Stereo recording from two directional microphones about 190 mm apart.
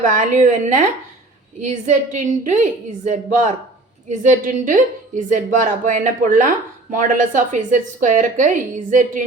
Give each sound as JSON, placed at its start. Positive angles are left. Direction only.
{"t": 0.0, "sound": "a woman's voice", "side_deg": -40}